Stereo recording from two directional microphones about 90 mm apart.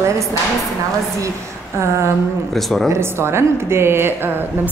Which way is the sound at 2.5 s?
5° left (ahead or behind).